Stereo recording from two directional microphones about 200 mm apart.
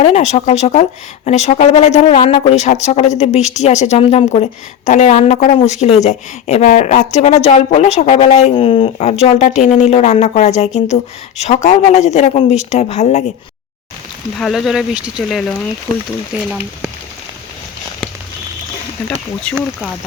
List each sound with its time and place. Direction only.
0.0 s a woman's voice: 35° left (ahead or behind)
14.3 s speech: centre (ahead or behind)